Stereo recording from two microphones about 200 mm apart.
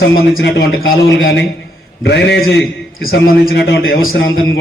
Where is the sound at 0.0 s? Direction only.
55° left (ahead or behind).